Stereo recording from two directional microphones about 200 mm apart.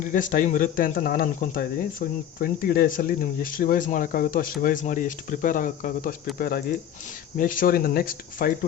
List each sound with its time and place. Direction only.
0.0 s speech: 40° left (ahead or behind)